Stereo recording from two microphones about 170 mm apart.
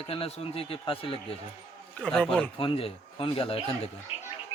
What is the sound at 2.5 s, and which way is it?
A man's voice, 30° left (ahead or behind).